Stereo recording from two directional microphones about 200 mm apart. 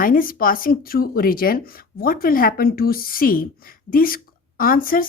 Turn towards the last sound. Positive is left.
turn(degrees=45)  # may be behind; listen again after turning